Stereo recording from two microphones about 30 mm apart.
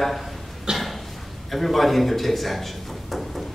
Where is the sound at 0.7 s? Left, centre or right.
Right.